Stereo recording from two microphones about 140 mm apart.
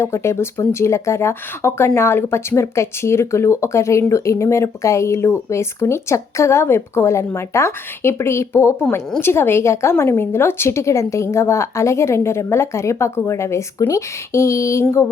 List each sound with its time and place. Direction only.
0.0 s speech: 20° left (ahead or behind)